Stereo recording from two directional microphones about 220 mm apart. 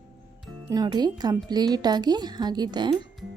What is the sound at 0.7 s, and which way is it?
A woman's voice, 20° right (ahead or behind).